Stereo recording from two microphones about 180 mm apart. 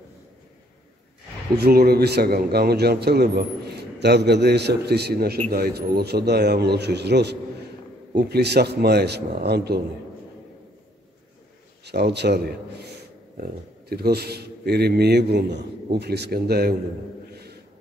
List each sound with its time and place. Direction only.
1.6 s speech: 60° right (ahead or behind)
11.8 s a man's voice: 65° right (ahead or behind)